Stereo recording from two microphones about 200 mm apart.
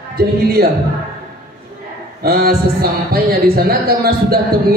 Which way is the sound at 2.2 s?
50° right (ahead or behind).